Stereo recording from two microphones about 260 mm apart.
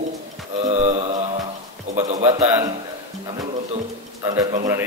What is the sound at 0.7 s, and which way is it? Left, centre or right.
Mantra, right.